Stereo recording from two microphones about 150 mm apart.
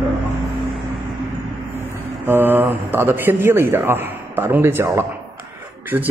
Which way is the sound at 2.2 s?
15° right (ahead or behind).